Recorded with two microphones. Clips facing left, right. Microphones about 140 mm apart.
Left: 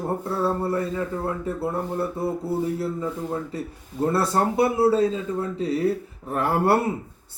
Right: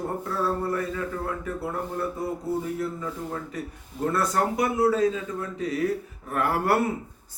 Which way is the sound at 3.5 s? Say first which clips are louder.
Left 4 dB; 30° left (ahead or behind).